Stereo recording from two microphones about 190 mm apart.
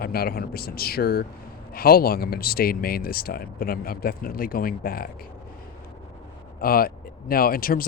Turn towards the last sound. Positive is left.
turn(degrees=50)  # may be behind; listen again after turning